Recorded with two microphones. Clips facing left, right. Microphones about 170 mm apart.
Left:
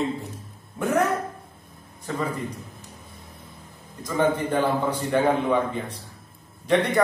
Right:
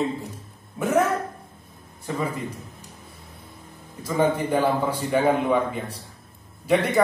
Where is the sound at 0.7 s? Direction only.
5° right (ahead or behind).